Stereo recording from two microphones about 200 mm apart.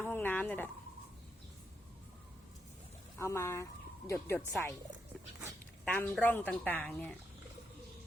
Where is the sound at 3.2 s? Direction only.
15° left (ahead or behind).